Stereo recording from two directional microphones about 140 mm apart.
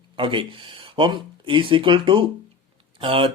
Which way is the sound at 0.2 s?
35° right (ahead or behind).